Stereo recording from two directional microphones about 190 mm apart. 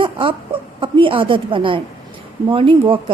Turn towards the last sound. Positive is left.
turn(degrees=-25)  # may be behind; listen again after turning